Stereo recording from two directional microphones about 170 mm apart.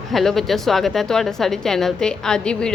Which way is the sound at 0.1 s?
Centre (ahead or behind).